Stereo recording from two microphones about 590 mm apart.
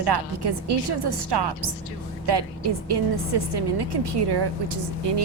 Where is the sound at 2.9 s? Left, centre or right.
Right.